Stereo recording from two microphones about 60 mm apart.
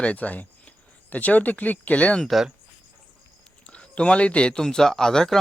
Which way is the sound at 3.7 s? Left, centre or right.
Centre.